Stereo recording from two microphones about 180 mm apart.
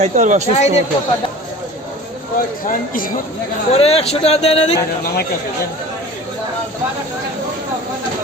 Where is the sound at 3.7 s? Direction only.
35° left (ahead or behind).